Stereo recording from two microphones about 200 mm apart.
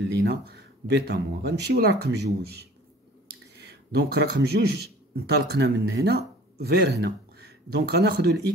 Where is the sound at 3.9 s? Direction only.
55° right (ahead or behind).